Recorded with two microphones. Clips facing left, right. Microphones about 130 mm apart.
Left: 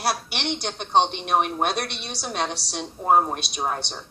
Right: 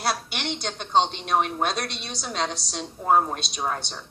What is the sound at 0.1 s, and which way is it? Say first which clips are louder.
A woman's voice: left 2 dB; 20° left (ahead or behind).